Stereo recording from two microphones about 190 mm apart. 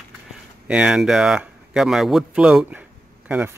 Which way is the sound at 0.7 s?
5° right (ahead or behind).